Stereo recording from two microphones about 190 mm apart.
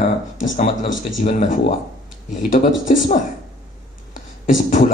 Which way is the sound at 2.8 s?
40° left (ahead or behind).